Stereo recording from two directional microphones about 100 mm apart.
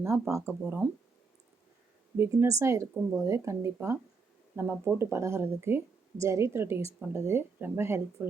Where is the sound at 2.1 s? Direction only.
25° right (ahead or behind).